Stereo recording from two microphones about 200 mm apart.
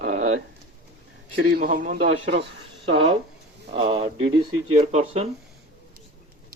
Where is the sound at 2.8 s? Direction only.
30° right (ahead or behind).